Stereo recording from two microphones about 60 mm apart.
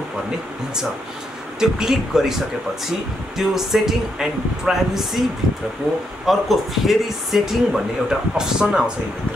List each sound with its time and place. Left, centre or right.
1.6 s speech: centre
6.2 s speech: centre